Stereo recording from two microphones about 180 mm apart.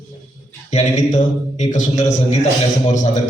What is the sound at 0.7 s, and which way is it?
A man's voice, 40° left (ahead or behind).